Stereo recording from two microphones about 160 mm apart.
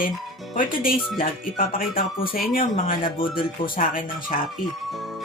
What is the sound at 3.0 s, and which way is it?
Speech, 30° left (ahead or behind).